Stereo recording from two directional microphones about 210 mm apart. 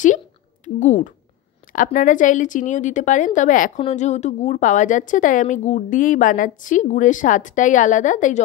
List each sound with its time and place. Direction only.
0.7 s a woman's voice: 35° left (ahead or behind)